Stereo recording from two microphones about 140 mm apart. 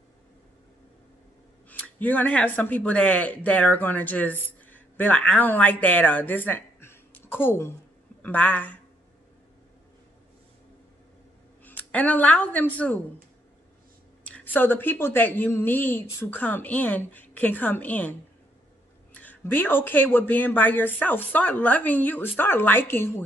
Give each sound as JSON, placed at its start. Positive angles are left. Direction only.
{"t": 1.7, "sound": "speech", "side_deg": 10}
{"t": 11.6, "sound": "a woman's voice", "side_deg": 10}
{"t": 14.2, "sound": "speech", "side_deg": 10}
{"t": 19.1, "sound": "speech", "side_deg": 15}